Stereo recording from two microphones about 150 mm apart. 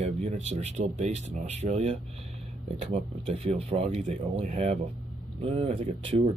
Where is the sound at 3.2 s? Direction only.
40° right (ahead or behind).